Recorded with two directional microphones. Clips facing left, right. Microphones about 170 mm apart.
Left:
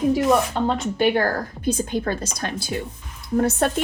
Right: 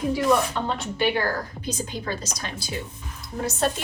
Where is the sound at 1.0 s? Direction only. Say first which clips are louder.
Left 4 dB; 50° left (ahead or behind).